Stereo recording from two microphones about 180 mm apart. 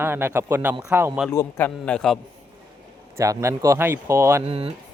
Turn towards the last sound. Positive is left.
turn(degrees=-30)  # may be behind; listen again after turning